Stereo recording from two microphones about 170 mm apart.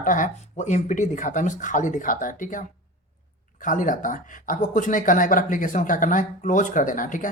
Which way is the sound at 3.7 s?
50° left (ahead or behind).